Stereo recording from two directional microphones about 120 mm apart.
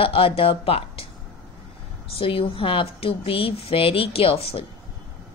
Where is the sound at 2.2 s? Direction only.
50° left (ahead or behind).